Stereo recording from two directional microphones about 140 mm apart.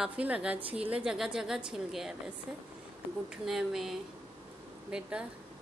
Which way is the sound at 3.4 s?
Centre (ahead or behind).